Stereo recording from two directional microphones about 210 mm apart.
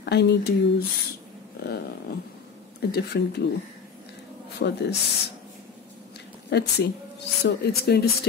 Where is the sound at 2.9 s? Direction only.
50° left (ahead or behind).